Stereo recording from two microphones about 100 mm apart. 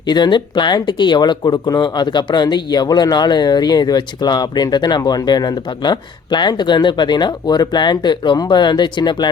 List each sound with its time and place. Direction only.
0.1 s speech: 50° left (ahead or behind)